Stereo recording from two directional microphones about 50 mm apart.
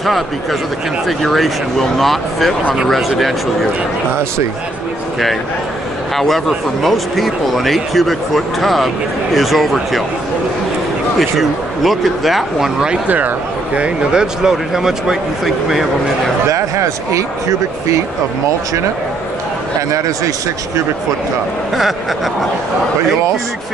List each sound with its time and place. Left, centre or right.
0.0 s speech: centre
6.1 s speech: centre
11.1 s speech: centre
13.7 s speech: centre
16.4 s speech: right